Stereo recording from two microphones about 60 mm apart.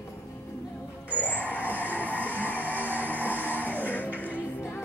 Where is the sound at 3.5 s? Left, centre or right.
Left.